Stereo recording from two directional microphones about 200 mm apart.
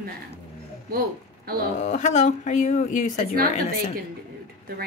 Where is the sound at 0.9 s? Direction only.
50° right (ahead or behind).